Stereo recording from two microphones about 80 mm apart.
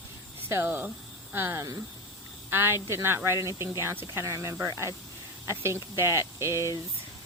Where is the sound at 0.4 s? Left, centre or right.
Right.